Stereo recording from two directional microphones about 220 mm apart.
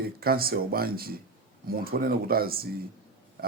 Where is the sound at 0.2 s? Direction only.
45° right (ahead or behind).